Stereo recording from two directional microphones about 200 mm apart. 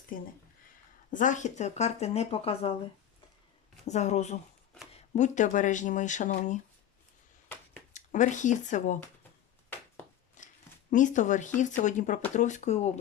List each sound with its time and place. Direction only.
0.1 s speech: 45° left (ahead or behind)
3.8 s speech: 35° left (ahead or behind)
7.4 s a sound: 5° left (ahead or behind)
7.9 s speech: 40° left (ahead or behind)
10.4 s a sound: 40° left (ahead or behind)
10.9 s speech: 40° left (ahead or behind)